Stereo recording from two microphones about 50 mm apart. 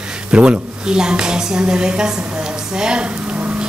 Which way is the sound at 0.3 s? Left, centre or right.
Right.